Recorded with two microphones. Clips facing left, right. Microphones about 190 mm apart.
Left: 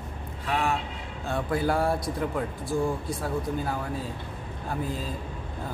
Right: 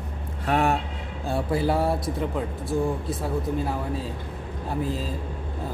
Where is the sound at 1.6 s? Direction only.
Centre (ahead or behind).